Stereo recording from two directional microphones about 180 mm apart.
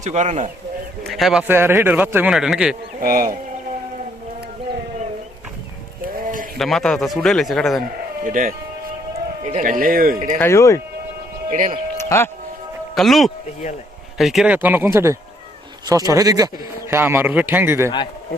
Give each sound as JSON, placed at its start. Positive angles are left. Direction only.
{"t": 0.0, "sound": "speech", "side_deg": -40}
{"t": 1.0, "sound": "a man's voice", "side_deg": 0}
{"t": 3.0, "sound": "speech", "side_deg": -55}
{"t": 6.6, "sound": "a man's voice", "side_deg": 0}
{"t": 8.2, "sound": "speech", "side_deg": -50}
{"t": 10.3, "sound": "speech", "side_deg": 15}
{"t": 11.4, "sound": "speech", "side_deg": -45}
{"t": 12.0, "sound": "speech", "side_deg": 15}
{"t": 13.0, "sound": "a man's voice", "side_deg": 0}